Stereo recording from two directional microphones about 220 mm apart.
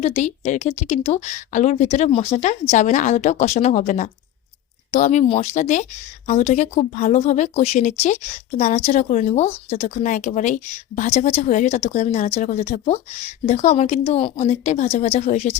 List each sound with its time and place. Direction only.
0.0 s speech: 35° left (ahead or behind)